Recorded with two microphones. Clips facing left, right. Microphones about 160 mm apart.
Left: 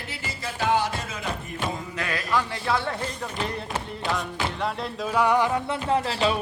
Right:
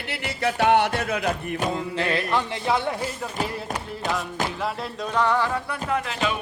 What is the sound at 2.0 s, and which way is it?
Speech, 25° right (ahead or behind).